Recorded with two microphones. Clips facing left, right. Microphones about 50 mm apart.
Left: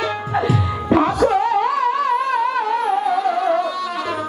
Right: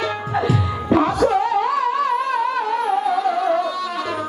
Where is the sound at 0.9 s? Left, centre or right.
Left.